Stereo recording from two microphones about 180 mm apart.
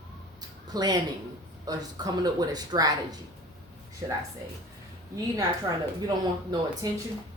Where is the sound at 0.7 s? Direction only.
20° right (ahead or behind).